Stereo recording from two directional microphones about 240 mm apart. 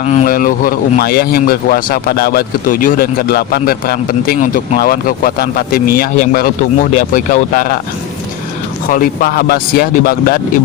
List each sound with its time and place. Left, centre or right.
0.0 s speech: left
8.9 s speech: left